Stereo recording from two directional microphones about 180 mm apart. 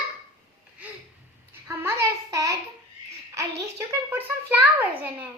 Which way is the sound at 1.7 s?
15° right (ahead or behind).